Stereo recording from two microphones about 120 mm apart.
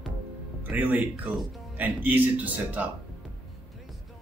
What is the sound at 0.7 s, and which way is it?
A man's voice, 15° right (ahead or behind).